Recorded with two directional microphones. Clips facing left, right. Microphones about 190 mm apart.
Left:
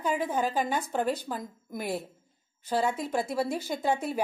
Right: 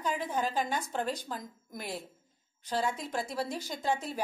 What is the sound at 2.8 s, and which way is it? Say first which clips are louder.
Speech: left 5 dB; 55° left (ahead or behind).